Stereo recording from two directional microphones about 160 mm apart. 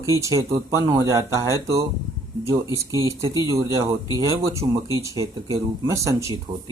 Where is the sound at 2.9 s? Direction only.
20° right (ahead or behind).